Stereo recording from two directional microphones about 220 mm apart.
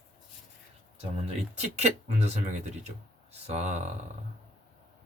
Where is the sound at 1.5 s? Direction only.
30° right (ahead or behind).